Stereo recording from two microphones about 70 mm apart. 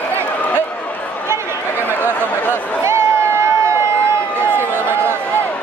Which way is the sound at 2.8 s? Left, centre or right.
Right.